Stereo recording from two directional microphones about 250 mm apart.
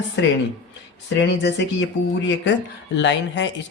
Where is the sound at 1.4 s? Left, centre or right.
Left.